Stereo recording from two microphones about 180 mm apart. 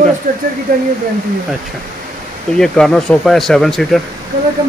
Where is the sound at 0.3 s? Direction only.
50° right (ahead or behind).